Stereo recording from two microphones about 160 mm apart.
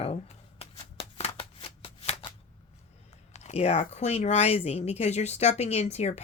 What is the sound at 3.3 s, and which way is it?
Speech, 40° left (ahead or behind).